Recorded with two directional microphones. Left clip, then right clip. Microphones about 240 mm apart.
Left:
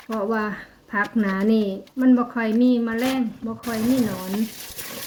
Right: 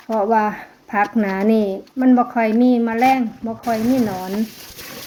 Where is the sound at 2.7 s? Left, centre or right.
Centre.